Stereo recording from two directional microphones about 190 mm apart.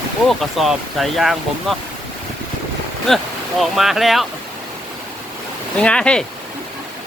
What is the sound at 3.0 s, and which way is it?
Speech, centre (ahead or behind).